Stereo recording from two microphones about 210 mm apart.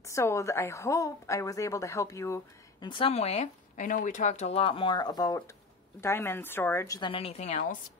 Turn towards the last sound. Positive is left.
turn(degrees=35)  # may be behind; listen again after turning